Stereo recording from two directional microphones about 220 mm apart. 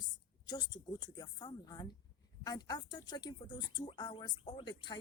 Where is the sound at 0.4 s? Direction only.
20° left (ahead or behind).